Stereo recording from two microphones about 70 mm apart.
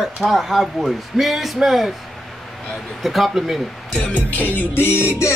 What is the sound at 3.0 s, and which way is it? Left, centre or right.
Speech, centre.